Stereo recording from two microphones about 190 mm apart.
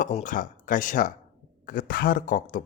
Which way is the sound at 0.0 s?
40° left (ahead or behind).